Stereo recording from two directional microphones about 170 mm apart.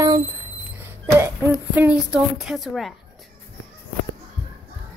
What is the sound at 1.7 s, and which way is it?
A woman's voice, 5° right (ahead or behind).